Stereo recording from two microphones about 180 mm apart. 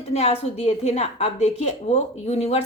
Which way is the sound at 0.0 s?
35° left (ahead or behind).